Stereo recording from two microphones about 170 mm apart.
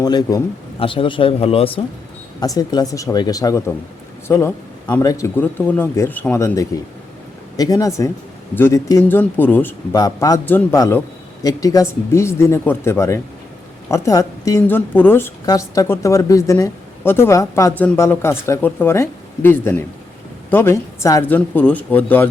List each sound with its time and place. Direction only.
0.0 s speech: 20° left (ahead or behind)
2.4 s a woman's voice: 20° left (ahead or behind)